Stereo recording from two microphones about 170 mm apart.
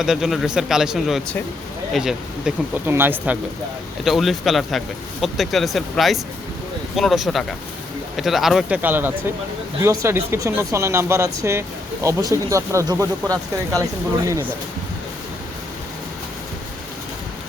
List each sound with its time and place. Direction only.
0.0 s speech: 5° right (ahead or behind)
4.0 s speech: centre (ahead or behind); by 13.8 s 20° right (ahead or behind)